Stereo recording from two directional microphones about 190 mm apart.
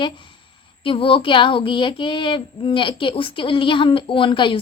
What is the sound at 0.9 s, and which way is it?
Speech, 30° left (ahead or behind).